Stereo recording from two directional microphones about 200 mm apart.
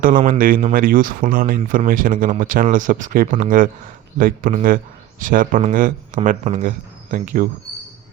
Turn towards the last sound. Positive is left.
turn(degrees=-40)  # may be behind; listen again after turning